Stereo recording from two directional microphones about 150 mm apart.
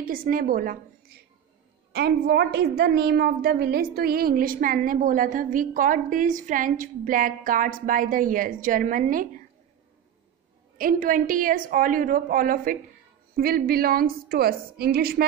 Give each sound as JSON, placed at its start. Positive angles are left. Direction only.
{"t": 0.0, "sound": "a woman's voice", "side_deg": -70}
{"t": 1.9, "sound": "a woman's voice", "side_deg": -90}
{"t": 10.8, "sound": "a woman's voice", "side_deg": -65}
{"t": 13.4, "sound": "a woman's voice", "side_deg": -90}